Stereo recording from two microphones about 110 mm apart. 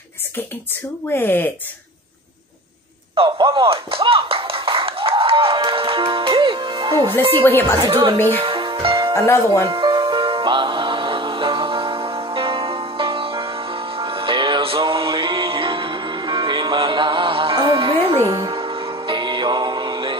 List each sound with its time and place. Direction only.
1.1 s speech: 20° left (ahead or behind)
3.3 s music: 45° right (ahead or behind)
7.4 s speech: 20° left (ahead or behind)
7.9 s speech: 50° right (ahead or behind)
8.4 s music: 50° right (ahead or behind)
9.1 s speech: 25° left (ahead or behind)
9.7 s music: 45° right (ahead or behind)
18.2 s music: 35° right (ahead or behind)
18.5 s music: 50° right (ahead or behind)